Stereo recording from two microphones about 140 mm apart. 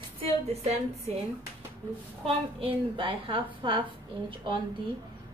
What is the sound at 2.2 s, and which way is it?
A woman's voice, 40° right (ahead or behind).